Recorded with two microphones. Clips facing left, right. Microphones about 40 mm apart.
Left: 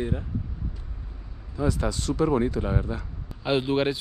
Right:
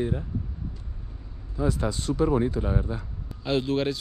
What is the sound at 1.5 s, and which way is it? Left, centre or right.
Speech, left.